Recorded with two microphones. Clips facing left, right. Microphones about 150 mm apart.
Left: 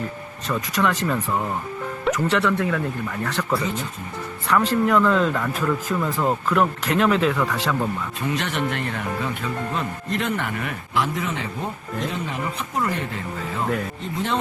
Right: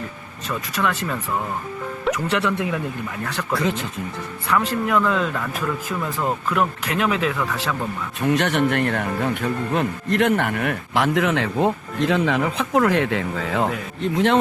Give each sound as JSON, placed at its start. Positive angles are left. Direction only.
{"t": 0.4, "sound": "speech", "side_deg": 0}
{"t": 4.4, "sound": "speech", "side_deg": -5}
{"t": 8.2, "sound": "speech", "side_deg": -60}
{"t": 14.0, "sound": "speech", "side_deg": -75}